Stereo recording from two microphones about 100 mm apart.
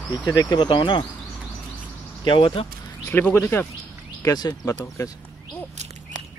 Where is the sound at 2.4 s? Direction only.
60° left (ahead or behind).